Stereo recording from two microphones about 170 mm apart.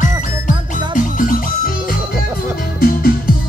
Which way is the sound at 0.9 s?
50° left (ahead or behind).